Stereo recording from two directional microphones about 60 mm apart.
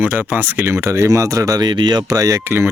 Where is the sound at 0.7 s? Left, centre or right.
Right.